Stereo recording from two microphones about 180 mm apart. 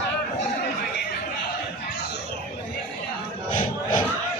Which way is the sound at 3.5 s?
50° left (ahead or behind).